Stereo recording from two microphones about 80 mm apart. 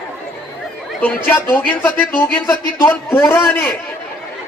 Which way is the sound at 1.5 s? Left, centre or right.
Left.